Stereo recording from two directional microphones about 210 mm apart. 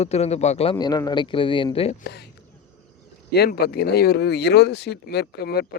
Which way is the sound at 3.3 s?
50° left (ahead or behind).